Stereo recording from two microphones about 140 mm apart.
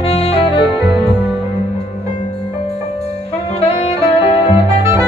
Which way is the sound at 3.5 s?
45° left (ahead or behind).